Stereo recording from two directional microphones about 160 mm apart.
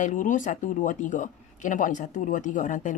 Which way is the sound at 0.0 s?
50° left (ahead or behind).